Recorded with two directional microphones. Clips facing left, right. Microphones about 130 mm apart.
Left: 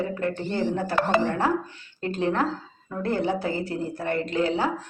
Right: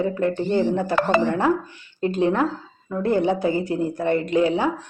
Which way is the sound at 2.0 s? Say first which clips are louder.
Right 5 dB; 20° right (ahead or behind).